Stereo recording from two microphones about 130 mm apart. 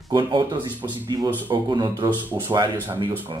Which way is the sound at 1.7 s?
35° right (ahead or behind).